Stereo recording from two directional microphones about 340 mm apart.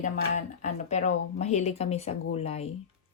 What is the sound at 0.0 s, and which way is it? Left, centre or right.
Speech, left.